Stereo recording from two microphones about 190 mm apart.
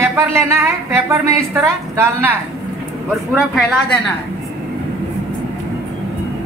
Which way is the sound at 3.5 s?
Centre (ahead or behind).